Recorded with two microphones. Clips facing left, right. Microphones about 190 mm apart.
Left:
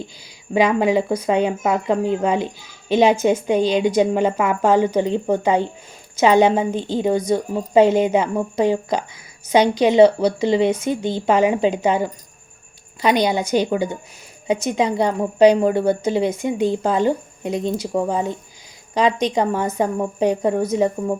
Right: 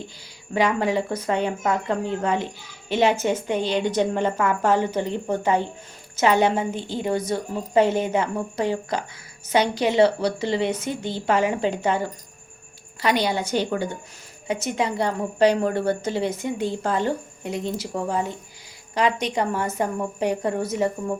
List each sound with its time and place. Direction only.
0.5 s a woman's voice: 15° left (ahead or behind)